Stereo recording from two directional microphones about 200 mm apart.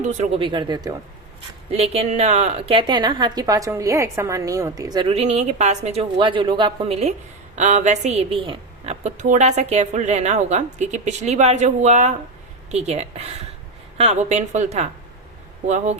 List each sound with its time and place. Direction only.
0.0 s a woman's voice: 25° right (ahead or behind)